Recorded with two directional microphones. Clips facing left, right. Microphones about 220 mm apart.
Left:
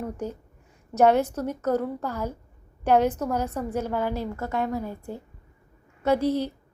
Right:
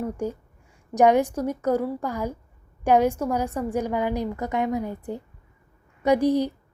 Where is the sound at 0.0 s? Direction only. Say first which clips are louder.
Right 4 dB; 10° right (ahead or behind).